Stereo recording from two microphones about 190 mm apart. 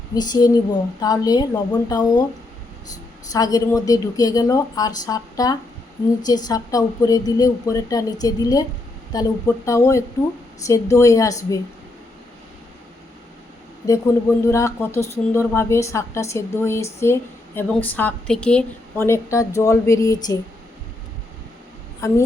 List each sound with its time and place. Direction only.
0.1 s a woman's voice: 20° left (ahead or behind)
13.8 s speech: 15° left (ahead or behind)
22.0 s speech: 15° left (ahead or behind)